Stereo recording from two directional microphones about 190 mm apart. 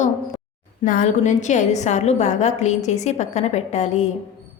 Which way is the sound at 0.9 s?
45° left (ahead or behind).